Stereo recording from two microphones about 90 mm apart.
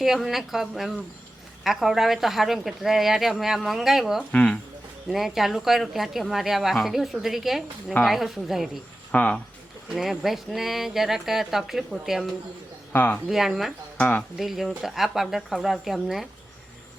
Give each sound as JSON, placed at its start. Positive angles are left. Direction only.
{"t": 0.0, "sound": "speech", "side_deg": 0}
{"t": 4.2, "sound": "a sound", "side_deg": 15}
{"t": 5.0, "sound": "speech", "side_deg": -5}
{"t": 9.1, "sound": "speech", "side_deg": 15}
{"t": 9.9, "sound": "speech", "side_deg": -5}
{"t": 12.9, "sound": "speech", "side_deg": 20}
{"t": 13.2, "sound": "speech", "side_deg": -5}
{"t": 14.0, "sound": "speech", "side_deg": 15}
{"t": 14.3, "sound": "speech", "side_deg": 0}